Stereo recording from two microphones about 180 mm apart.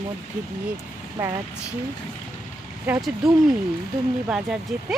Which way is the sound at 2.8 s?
5° right (ahead or behind).